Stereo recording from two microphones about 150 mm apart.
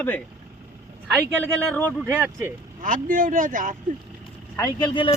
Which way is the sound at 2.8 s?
65° right (ahead or behind).